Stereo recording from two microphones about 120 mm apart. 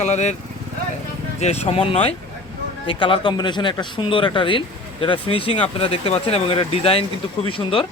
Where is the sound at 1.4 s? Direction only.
65° left (ahead or behind).